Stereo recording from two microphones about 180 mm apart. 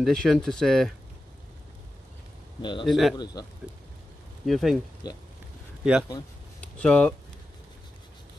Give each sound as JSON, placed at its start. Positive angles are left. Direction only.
{"t": 0.0, "sound": "speech", "side_deg": 5}
{"t": 2.6, "sound": "a man's voice", "side_deg": 25}
{"t": 2.9, "sound": "speech", "side_deg": 0}
{"t": 4.5, "sound": "speech", "side_deg": 0}
{"t": 5.0, "sound": "a man's voice", "side_deg": 20}
{"t": 6.6, "sound": "speech", "side_deg": 5}